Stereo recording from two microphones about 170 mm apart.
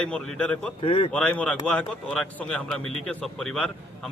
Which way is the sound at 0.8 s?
35° left (ahead or behind).